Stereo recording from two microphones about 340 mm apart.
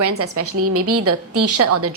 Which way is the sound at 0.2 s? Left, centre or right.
Right.